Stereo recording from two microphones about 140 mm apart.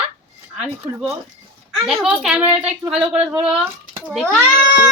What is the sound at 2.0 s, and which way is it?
Speech, 5° right (ahead or behind).